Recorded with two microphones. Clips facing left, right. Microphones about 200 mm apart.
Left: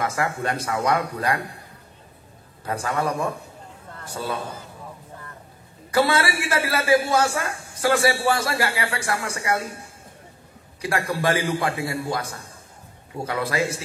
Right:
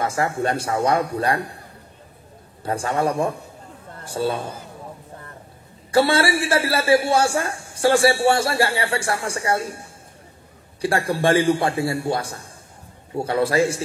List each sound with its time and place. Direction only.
0.0 s a man's voice: 30° right (ahead or behind)
2.6 s a man's voice: 30° right (ahead or behind)
5.9 s a man's voice: 30° right (ahead or behind)
10.8 s a man's voice: 30° right (ahead or behind)